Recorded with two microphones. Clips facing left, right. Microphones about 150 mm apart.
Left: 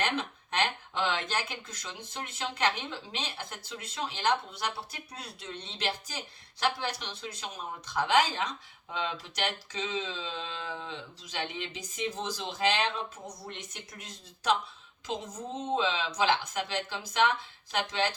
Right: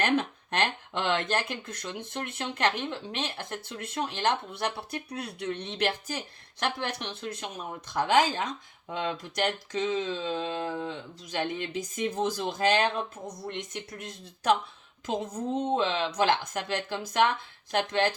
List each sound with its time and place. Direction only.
0.0 s speech: 55° right (ahead or behind)
14.0 s speech: 55° right (ahead or behind)